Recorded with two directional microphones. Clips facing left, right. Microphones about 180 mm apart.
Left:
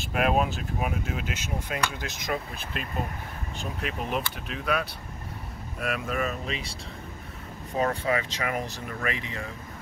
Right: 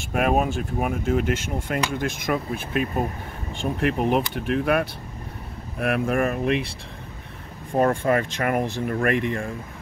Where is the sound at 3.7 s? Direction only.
60° right (ahead or behind).